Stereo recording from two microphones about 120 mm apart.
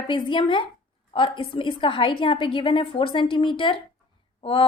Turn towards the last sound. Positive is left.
turn(degrees=50)  # may be behind; listen again after turning